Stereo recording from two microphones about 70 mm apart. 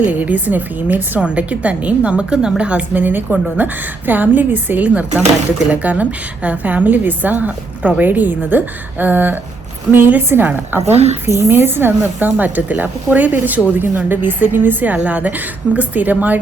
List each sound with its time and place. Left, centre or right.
0.0 s a woman's voice: right